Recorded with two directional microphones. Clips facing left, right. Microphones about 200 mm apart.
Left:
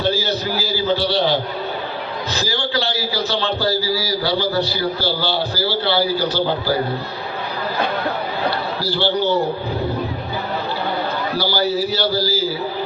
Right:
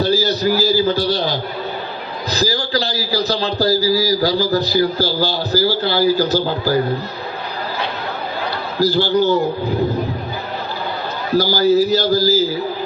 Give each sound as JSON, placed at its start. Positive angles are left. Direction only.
{"t": 0.0, "sound": "a sound", "side_deg": -40}
{"t": 2.3, "sound": "a man's voice", "side_deg": -40}
{"t": 8.8, "sound": "a man's voice", "side_deg": -45}
{"t": 11.3, "sound": "a man's voice", "side_deg": -45}